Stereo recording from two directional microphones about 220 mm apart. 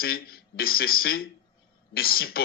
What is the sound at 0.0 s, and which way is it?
Speech, 45° left (ahead or behind).